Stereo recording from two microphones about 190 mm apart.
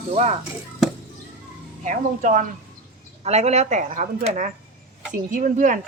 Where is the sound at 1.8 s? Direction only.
45° right (ahead or behind).